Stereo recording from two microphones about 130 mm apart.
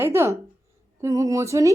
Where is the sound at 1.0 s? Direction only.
25° right (ahead or behind).